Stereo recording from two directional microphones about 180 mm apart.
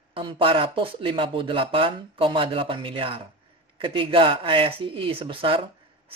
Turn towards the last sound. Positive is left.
turn(degrees=-30)  # may be behind; listen again after turning